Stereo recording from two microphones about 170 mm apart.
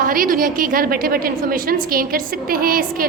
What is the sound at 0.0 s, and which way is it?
A woman's voice, 55° right (ahead or behind).